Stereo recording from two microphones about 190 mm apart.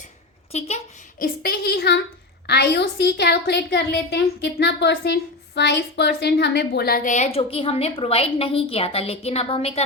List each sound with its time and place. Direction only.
0.5 s a child's voice: 35° left (ahead or behind)
1.2 s a woman's voice: 50° left (ahead or behind); by 9.8 s 30° left (ahead or behind)